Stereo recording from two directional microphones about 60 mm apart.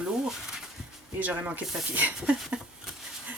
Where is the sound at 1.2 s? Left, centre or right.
Right.